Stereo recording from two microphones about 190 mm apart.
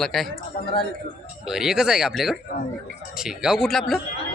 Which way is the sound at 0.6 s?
50° left (ahead or behind).